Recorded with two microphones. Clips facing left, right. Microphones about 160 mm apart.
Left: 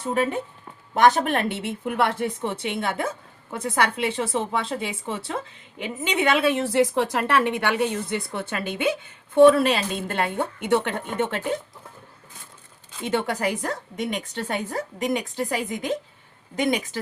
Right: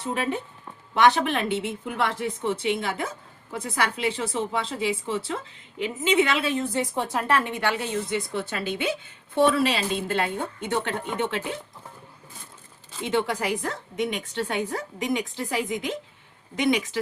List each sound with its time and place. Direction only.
0.0 s a woman's voice: 45° left (ahead or behind)
13.0 s a woman's voice: 50° left (ahead or behind)